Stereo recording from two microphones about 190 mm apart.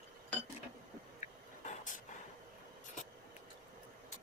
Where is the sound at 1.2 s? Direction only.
40° left (ahead or behind).